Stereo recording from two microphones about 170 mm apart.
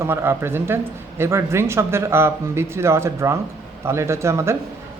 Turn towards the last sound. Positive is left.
turn(degrees=-15)  # may be behind; listen again after turning